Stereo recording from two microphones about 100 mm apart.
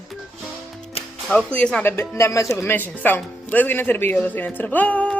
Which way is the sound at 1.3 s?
10° left (ahead or behind).